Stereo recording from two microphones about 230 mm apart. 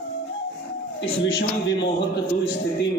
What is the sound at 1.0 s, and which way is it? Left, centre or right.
Speech, left.